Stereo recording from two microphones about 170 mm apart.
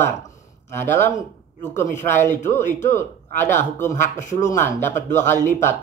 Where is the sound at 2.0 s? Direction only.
15° left (ahead or behind).